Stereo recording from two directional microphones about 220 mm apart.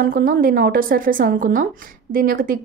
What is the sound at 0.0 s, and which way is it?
A woman's voice, 40° right (ahead or behind).